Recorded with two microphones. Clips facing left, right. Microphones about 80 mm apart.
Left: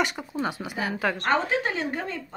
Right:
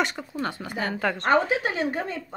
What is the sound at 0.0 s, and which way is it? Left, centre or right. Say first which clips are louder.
Speech: even; centre.